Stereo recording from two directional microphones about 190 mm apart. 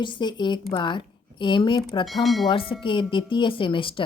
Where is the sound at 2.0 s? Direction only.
Centre (ahead or behind).